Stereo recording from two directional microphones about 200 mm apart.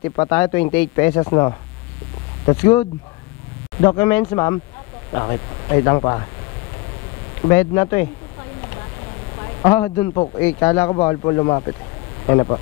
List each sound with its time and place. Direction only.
0.1 s speech: 20° left (ahead or behind)
7.4 s speech: 15° left (ahead or behind)
9.6 s speech: 15° left (ahead or behind)